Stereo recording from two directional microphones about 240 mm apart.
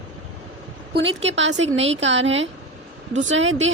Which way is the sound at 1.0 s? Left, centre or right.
Right.